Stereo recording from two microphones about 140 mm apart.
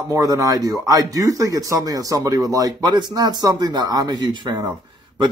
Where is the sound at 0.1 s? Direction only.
25° right (ahead or behind).